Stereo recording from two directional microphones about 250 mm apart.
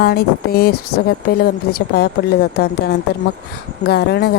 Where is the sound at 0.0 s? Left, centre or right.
Left.